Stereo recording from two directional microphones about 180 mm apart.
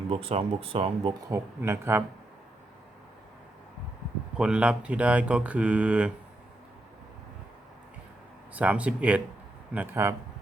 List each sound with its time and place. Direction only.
0.1 s speech: 30° right (ahead or behind)
1.3 s speech: 15° right (ahead or behind)
4.4 s speech: 5° right (ahead or behind)
8.5 s speech: 10° right (ahead or behind)